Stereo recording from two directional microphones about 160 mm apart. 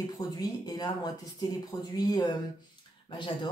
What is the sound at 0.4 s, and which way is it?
Speech, 25° left (ahead or behind).